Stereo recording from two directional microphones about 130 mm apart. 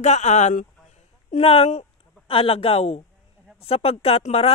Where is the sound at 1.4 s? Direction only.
50° left (ahead or behind).